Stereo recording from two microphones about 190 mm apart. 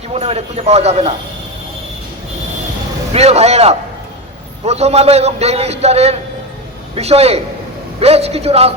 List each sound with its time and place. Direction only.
0.1 s a man's voice: 30° right (ahead or behind)
3.1 s a man's voice: 35° right (ahead or behind)